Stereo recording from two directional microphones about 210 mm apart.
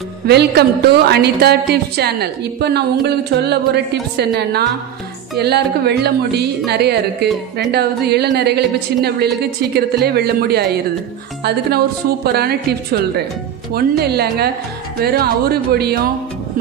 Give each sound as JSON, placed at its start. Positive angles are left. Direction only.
{"t": 0.3, "sound": "a woman's voice", "side_deg": -50}
{"t": 12.4, "sound": "a woman's voice", "side_deg": -50}